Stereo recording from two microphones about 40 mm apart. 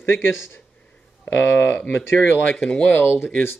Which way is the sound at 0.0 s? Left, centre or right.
Left.